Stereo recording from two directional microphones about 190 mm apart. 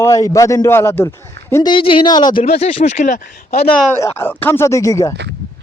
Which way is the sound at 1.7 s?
25° left (ahead or behind).